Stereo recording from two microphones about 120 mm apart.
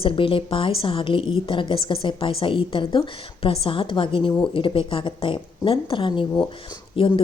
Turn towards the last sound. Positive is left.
turn(degrees=45)  # may be behind; listen again after turning